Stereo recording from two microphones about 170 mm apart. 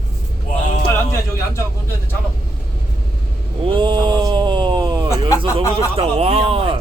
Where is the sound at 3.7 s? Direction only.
30° right (ahead or behind).